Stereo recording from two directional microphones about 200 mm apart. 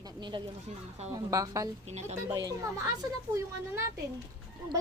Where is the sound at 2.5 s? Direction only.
15° right (ahead or behind).